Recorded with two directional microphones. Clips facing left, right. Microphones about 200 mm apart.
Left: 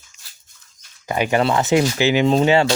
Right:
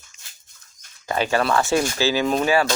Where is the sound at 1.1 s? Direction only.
15° left (ahead or behind).